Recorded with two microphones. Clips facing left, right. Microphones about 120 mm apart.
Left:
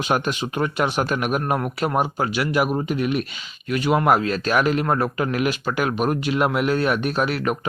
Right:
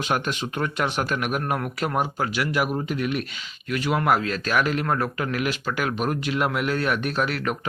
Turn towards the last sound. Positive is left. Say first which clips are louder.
# left 3 dB
turn(degrees=15)  # may be behind; listen again after turning